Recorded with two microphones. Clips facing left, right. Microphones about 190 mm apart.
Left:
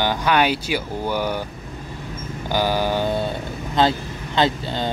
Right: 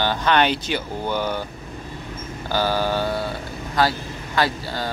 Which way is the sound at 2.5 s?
15° left (ahead or behind).